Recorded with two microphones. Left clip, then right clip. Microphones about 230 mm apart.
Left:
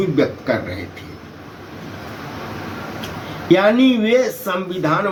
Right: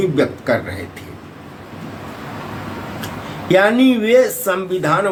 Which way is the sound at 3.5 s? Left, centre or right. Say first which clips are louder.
Right 1 dB; centre.